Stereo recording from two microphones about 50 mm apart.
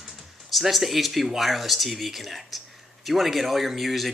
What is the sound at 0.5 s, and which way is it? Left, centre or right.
Speech, centre.